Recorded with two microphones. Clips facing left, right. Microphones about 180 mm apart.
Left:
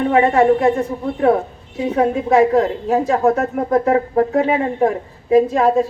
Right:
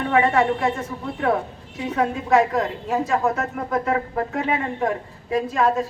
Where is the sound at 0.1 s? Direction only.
30° left (ahead or behind).